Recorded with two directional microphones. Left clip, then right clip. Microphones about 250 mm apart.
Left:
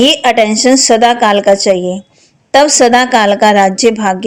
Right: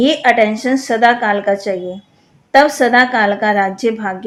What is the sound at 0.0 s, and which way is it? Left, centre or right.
A woman's voice, left.